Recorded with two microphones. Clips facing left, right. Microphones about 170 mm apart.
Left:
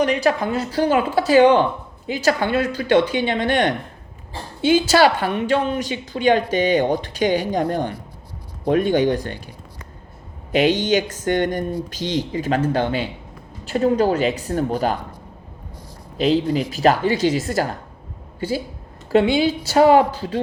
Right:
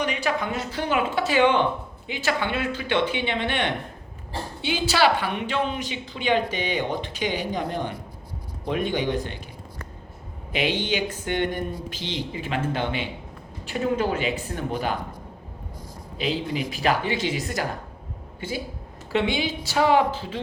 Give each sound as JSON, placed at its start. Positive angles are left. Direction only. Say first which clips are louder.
{"t": 0.0, "sound": "a woman's voice", "louder": "left 7 dB", "side_deg": 35}
{"t": 10.5, "sound": "a woman's voice", "louder": "left 8 dB", "side_deg": 45}
{"t": 16.1, "sound": "speech", "louder": "left 9 dB", "side_deg": 40}